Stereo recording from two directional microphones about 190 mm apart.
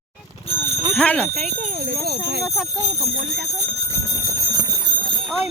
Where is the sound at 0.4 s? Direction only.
30° left (ahead or behind).